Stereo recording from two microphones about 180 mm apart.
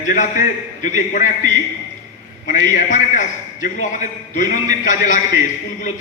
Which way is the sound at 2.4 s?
45° left (ahead or behind).